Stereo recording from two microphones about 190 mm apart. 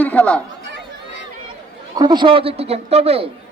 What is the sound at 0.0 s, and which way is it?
Chatter, 10° left (ahead or behind).